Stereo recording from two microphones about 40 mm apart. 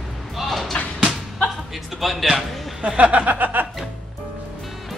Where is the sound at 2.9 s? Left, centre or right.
Right.